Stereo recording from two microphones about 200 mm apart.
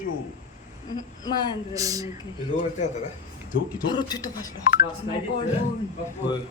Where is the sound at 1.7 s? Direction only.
15° right (ahead or behind).